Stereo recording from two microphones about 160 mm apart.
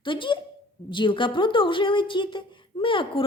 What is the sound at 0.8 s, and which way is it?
A woman's voice, 30° left (ahead or behind).